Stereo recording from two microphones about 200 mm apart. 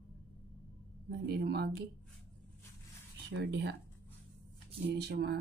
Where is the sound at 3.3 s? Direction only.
60° right (ahead or behind).